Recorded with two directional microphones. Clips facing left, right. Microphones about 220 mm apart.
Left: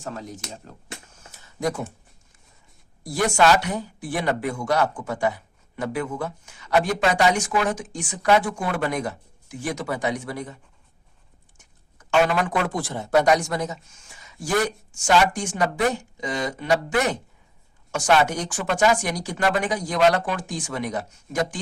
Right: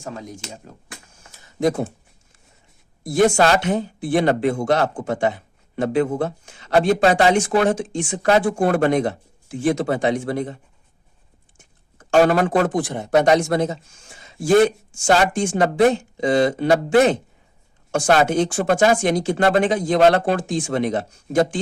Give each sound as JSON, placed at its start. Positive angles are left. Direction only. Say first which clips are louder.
{"t": 0.2, "sound": "speech", "louder": "right 1 dB", "side_deg": -15}
{"t": 3.0, "sound": "speech", "louder": "right 5 dB", "side_deg": -25}
{"t": 8.6, "sound": "speech", "louder": "right 8 dB", "side_deg": -50}
{"t": 8.9, "sound": "speech", "louder": "right 8 dB", "side_deg": -30}
{"t": 11.9, "sound": "speech", "louder": "right 5 dB", "side_deg": -40}
{"t": 12.8, "sound": "speech", "louder": "right 3 dB", "side_deg": -15}
{"t": 17.9, "sound": "speech", "louder": "right 3 dB", "side_deg": -45}
{"t": 18.3, "sound": "speech", "louder": "right 8 dB", "side_deg": -25}